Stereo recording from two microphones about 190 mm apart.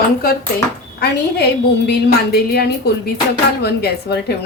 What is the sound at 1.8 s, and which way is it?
Speech, 55° left (ahead or behind).